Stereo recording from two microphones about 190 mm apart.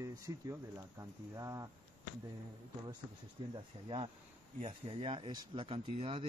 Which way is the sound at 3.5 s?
25° right (ahead or behind).